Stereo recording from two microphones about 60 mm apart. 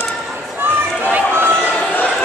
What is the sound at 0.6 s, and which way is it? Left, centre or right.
Run, right.